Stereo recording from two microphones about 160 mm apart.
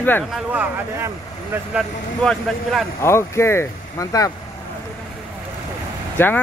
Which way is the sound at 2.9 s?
15° left (ahead or behind).